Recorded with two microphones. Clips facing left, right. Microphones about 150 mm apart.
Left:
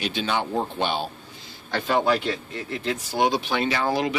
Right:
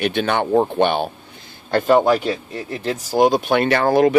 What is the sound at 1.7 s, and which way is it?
Speech, 45° right (ahead or behind).